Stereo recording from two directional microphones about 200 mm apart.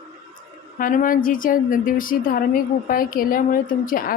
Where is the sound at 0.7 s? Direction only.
45° left (ahead or behind).